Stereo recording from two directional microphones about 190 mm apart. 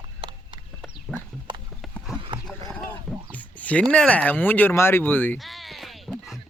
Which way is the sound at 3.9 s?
5° left (ahead or behind).